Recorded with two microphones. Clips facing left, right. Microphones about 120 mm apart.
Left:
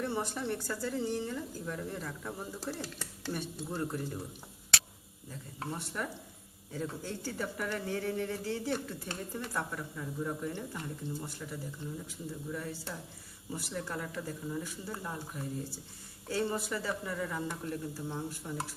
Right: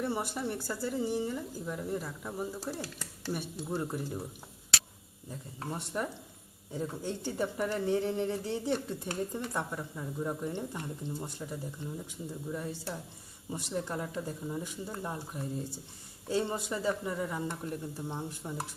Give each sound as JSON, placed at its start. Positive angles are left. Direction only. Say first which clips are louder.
{"t": 0.0, "sound": "a woman's voice", "louder": "right 1 dB", "side_deg": -10}
{"t": 5.7, "sound": "speech", "louder": "right 4 dB", "side_deg": -25}